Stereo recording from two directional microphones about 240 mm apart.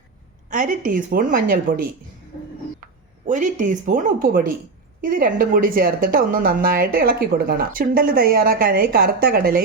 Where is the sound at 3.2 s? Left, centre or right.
Right.